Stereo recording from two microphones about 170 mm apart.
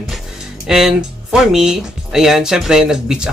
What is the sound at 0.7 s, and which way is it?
Speech, 5° right (ahead or behind).